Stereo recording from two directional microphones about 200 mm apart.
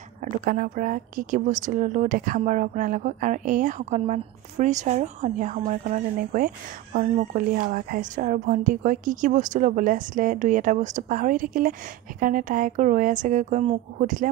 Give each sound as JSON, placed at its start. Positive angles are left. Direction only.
{"t": 0.2, "sound": "speech", "side_deg": -45}